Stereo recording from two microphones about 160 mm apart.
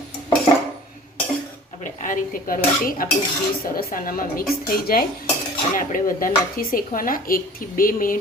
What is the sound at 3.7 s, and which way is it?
Speech, 60° left (ahead or behind).